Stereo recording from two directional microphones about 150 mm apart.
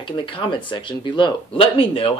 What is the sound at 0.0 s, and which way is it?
A woman's voice, 35° left (ahead or behind).